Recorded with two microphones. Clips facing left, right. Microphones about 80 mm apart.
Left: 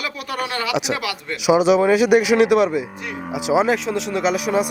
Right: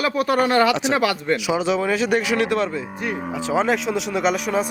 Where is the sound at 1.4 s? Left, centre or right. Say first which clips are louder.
Left 10 dB; centre.